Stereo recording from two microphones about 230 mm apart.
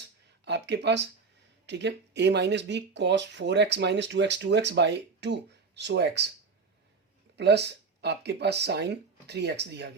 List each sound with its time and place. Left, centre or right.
0.4 s speech: right
7.3 s speech: right